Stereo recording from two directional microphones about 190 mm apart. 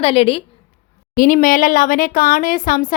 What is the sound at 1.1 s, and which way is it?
Speech, 45° left (ahead or behind).